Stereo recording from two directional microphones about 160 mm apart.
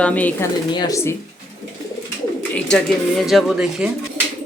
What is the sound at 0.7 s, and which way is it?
Speech, 25° left (ahead or behind).